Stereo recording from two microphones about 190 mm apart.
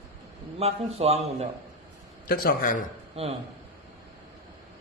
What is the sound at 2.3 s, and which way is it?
Speech, 50° left (ahead or behind).